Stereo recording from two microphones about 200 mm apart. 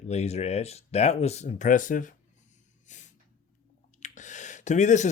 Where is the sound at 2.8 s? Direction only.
35° left (ahead or behind).